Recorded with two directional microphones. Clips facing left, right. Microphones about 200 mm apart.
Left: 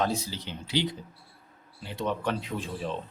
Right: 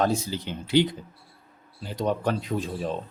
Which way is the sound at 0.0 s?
50° right (ahead or behind).